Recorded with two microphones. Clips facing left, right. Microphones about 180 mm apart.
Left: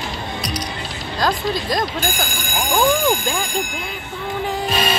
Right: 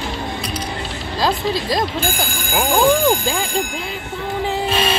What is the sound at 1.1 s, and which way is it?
Speech, 30° right (ahead or behind).